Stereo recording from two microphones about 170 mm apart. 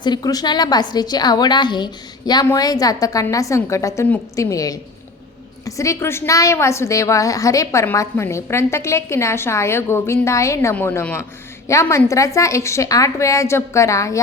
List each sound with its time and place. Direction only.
0.0 s a woman's voice: 25° left (ahead or behind)